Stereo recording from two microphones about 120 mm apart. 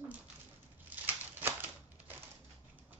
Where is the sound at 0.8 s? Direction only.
15° right (ahead or behind).